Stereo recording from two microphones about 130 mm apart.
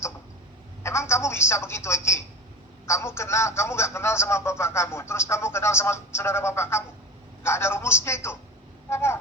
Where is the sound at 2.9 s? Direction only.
20° left (ahead or behind).